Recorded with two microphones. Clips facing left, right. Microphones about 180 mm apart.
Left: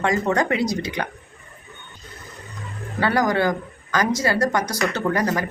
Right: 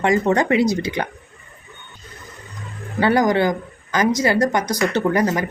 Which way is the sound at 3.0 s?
20° right (ahead or behind).